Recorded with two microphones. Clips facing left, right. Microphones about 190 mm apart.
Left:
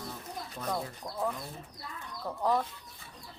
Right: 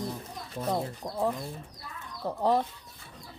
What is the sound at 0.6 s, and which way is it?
Speech, 30° right (ahead or behind).